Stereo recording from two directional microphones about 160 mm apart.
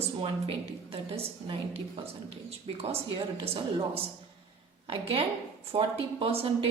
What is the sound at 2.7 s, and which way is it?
Speech, 35° right (ahead or behind).